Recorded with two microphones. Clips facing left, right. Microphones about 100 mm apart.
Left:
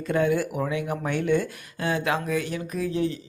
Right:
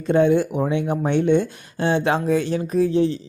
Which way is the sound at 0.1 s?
25° right (ahead or behind).